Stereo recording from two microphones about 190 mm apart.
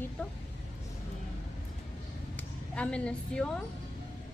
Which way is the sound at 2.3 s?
5° left (ahead or behind).